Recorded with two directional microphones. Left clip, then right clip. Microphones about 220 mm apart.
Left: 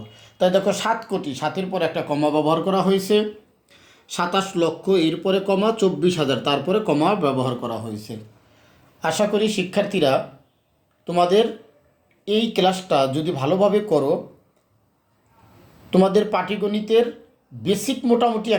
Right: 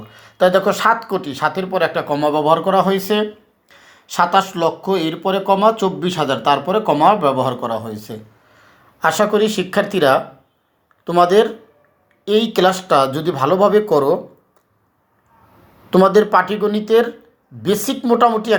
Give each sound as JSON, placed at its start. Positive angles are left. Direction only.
{"t": 0.1, "sound": "speech", "side_deg": -15}
{"t": 15.9, "sound": "speech", "side_deg": -15}